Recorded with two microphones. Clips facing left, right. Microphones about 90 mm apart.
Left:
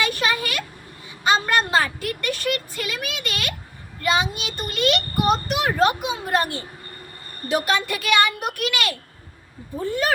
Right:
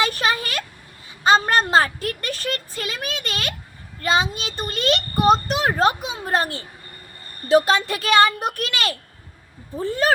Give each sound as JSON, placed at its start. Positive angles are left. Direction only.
{"t": 0.0, "sound": "vehicle", "side_deg": -35}
{"t": 1.2, "sound": "a child's voice", "side_deg": -35}